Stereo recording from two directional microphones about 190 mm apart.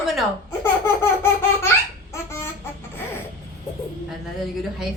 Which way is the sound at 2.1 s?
15° left (ahead or behind).